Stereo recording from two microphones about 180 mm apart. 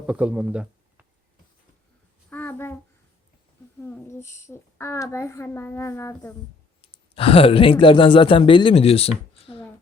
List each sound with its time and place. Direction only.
0.1 s speech: 5° right (ahead or behind)
2.3 s a sound: 10° left (ahead or behind)
3.8 s a child's voice: 10° left (ahead or behind)
7.1 s speech: 30° left (ahead or behind)